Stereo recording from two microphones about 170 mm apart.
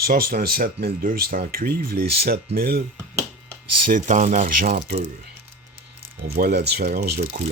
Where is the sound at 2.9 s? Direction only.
20° right (ahead or behind).